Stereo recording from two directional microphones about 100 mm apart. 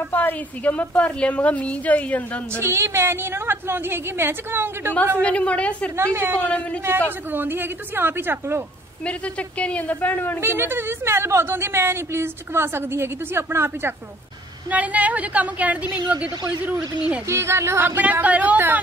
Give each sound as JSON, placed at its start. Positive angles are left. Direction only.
{"t": 0.1, "sound": "a woman's voice", "side_deg": 20}
{"t": 2.6, "sound": "a woman's voice", "side_deg": -25}
{"t": 5.2, "sound": "a woman's voice", "side_deg": 10}
{"t": 5.9, "sound": "a woman's voice", "side_deg": -25}
{"t": 6.4, "sound": "a woman's voice", "side_deg": 15}
{"t": 6.8, "sound": "a woman's voice", "side_deg": -20}
{"t": 9.0, "sound": "a woman's voice", "side_deg": 10}
{"t": 10.4, "sound": "a woman's voice", "side_deg": -25}
{"t": 17.3, "sound": "a woman's voice", "side_deg": -25}